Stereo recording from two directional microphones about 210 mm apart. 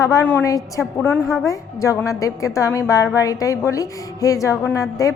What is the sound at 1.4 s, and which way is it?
A woman's voice, 15° left (ahead or behind).